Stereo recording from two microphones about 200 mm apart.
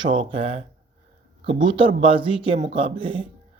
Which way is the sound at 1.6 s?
25° right (ahead or behind).